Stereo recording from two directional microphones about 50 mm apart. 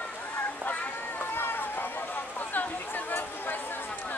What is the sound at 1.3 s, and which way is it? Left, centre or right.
Run, left.